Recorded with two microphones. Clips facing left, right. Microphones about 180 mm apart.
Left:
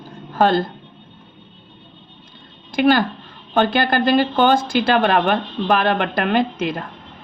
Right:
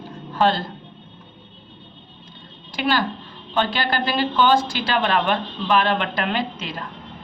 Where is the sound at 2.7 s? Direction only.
50° left (ahead or behind).